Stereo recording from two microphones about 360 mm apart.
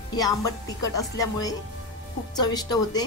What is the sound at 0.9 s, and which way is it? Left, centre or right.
A woman's voice, centre.